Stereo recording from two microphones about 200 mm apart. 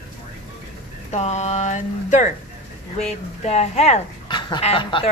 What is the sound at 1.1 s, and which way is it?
Speech, 35° left (ahead or behind).